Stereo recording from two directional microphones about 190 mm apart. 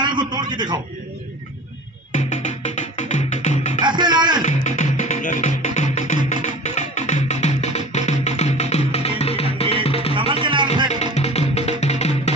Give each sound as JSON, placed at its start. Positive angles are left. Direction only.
{"t": 0.0, "sound": "a sound", "side_deg": -25}
{"t": 2.1, "sound": "music", "side_deg": 40}
{"t": 3.8, "sound": "music", "side_deg": -25}
{"t": 4.5, "sound": "music", "side_deg": 40}
{"t": 10.1, "sound": "music", "side_deg": -25}
{"t": 11.1, "sound": "music", "side_deg": 35}